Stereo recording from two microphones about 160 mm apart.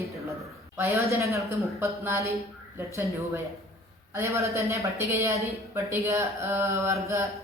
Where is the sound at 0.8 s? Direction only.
15° right (ahead or behind).